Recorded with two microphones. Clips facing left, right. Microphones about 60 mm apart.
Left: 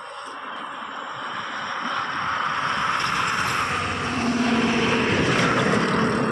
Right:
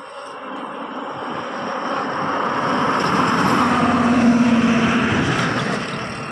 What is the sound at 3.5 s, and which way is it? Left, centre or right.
Vehicle, right.